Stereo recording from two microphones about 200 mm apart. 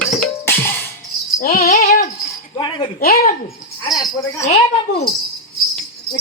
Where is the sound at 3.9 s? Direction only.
20° left (ahead or behind).